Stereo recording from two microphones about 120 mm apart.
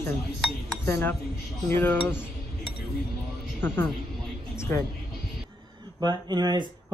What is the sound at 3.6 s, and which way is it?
A woman's voice, 15° left (ahead or behind).